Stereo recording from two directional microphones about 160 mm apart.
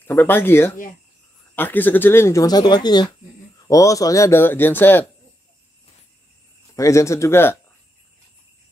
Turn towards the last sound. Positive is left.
turn(degrees=15)  # may be behind; listen again after turning